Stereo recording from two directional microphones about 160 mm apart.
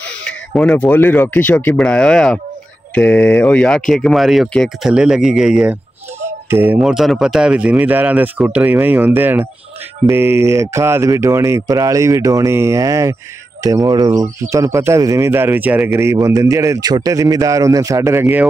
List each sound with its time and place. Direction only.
0.2 s speech: 5° left (ahead or behind); by 18.5 s 15° right (ahead or behind)